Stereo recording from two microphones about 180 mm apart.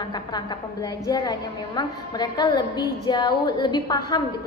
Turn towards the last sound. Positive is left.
turn(degrees=25)  # may be behind; listen again after turning